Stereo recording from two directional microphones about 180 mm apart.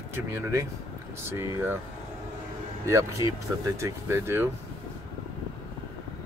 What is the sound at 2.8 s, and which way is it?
Speech, 15° right (ahead or behind).